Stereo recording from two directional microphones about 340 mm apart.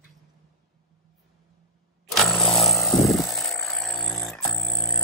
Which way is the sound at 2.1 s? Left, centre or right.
Centre.